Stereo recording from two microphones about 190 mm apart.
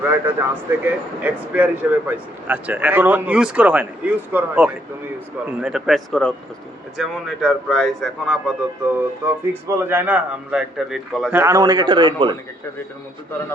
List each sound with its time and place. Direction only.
0.0 s speech: 10° right (ahead or behind)
9.2 s speech: 10° right (ahead or behind)
11.3 s a man's voice: 10° right (ahead or behind)